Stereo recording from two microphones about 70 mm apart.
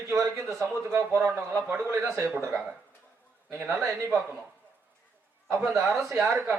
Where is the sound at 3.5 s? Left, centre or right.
Right.